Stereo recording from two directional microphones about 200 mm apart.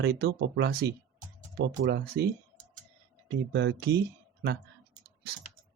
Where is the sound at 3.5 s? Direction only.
60° right (ahead or behind).